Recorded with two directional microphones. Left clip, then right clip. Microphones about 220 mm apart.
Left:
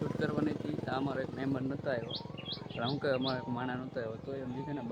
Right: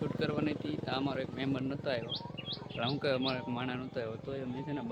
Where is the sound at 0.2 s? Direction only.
5° left (ahead or behind).